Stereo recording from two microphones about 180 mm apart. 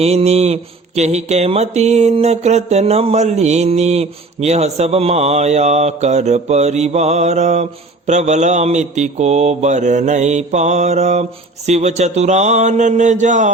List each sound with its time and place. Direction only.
0.0 s mantra: 35° right (ahead or behind)